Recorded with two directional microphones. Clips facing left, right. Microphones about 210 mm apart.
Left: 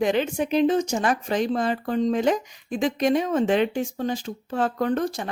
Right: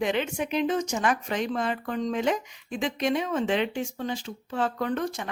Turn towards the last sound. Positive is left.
turn(degrees=35)  # may be behind; listen again after turning